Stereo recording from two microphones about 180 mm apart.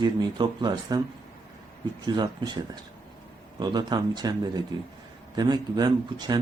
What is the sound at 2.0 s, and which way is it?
Speech, 25° right (ahead or behind).